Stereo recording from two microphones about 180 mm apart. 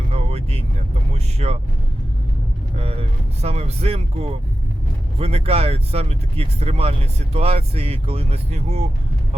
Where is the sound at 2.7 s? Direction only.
35° right (ahead or behind).